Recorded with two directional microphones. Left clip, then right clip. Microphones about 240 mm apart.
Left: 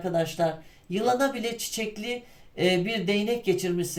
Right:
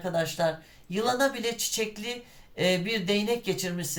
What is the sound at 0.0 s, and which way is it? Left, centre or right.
Speech, centre.